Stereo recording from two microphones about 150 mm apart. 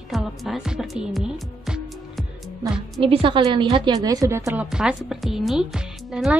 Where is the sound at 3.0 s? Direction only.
35° right (ahead or behind); by 4.6 s 20° right (ahead or behind).